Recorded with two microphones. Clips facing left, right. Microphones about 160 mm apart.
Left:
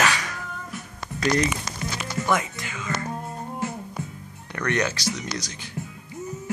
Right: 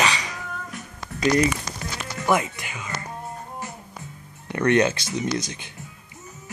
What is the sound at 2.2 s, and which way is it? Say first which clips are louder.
Music: right 4 dB; 15° right (ahead or behind).